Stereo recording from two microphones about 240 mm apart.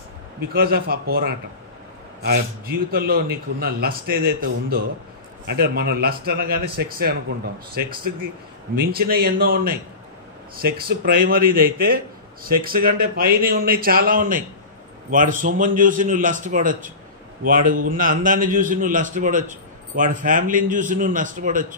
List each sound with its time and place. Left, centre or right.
0.4 s a man's voice: right